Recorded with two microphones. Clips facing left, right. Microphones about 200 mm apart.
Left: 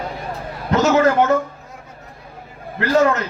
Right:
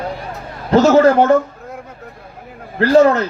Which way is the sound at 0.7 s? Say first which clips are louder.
Right 5 dB; 30° right (ahead or behind).